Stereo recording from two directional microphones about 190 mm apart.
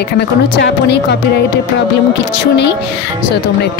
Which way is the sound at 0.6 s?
65° left (ahead or behind).